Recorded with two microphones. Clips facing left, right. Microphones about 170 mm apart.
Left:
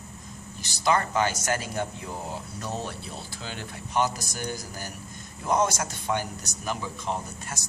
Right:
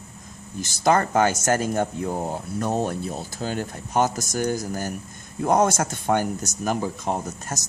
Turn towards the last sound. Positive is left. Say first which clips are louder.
# right 6 dB
turn(degrees=-40)  # may be behind; listen again after turning